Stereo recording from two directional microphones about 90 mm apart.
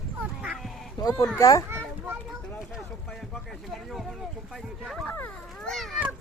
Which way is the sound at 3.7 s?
Centre (ahead or behind).